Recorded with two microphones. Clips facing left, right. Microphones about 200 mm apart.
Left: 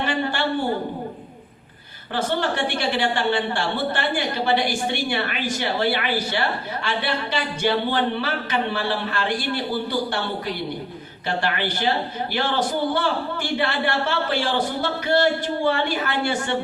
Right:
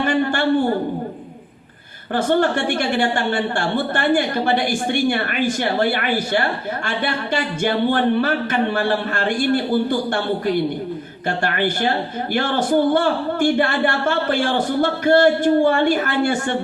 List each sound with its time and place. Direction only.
0.0 s a woman's voice: 50° right (ahead or behind)
2.1 s a man's voice: 50° right (ahead or behind)